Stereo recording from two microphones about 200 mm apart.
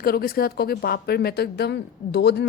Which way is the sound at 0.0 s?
50° left (ahead or behind).